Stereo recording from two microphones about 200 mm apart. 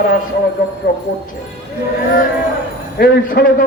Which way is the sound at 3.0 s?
45° left (ahead or behind).